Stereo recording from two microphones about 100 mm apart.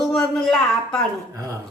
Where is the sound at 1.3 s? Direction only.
35° right (ahead or behind).